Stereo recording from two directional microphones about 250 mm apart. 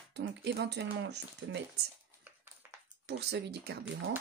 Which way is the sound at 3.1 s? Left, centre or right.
Right.